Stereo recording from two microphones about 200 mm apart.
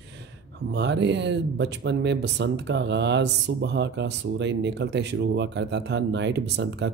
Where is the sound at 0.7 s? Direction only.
60° right (ahead or behind).